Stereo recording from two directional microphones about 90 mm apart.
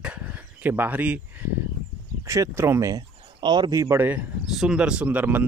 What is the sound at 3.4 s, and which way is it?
Speech, 60° right (ahead or behind).